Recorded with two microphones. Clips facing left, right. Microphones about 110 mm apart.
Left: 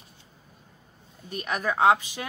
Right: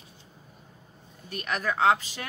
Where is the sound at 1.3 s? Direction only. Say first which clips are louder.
Left 2 dB; 15° left (ahead or behind).